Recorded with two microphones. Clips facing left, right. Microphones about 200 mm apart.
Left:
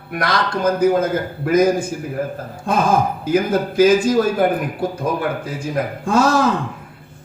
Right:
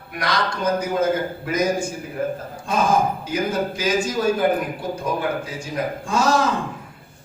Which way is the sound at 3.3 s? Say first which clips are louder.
Left 9 dB; 55° left (ahead or behind).